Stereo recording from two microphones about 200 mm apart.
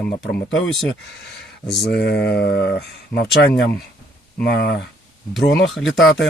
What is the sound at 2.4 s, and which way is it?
Speech, 55° left (ahead or behind).